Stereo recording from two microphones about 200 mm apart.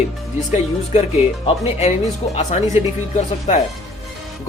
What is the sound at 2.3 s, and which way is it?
A man's voice, 35° left (ahead or behind).